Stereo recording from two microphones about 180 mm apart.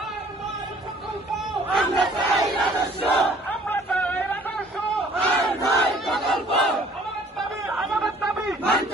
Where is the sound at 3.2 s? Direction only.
5° left (ahead or behind).